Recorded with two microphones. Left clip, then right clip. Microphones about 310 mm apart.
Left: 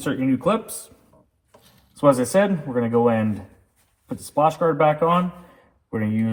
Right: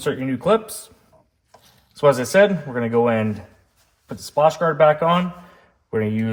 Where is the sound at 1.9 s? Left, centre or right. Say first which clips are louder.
Right 3 dB; right.